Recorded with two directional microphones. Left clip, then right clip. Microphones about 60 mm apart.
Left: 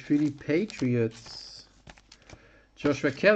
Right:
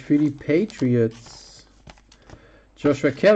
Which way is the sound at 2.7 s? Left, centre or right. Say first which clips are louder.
Right 7 dB; centre.